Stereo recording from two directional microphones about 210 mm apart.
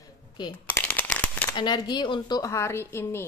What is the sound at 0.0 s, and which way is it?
Shuffling cards, 20° left (ahead or behind).